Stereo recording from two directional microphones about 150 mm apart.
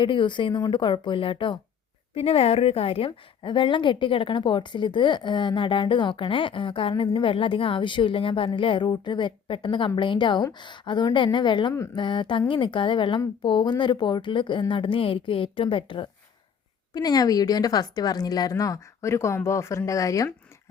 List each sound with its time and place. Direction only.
0.0 s a woman's voice: 35° left (ahead or behind)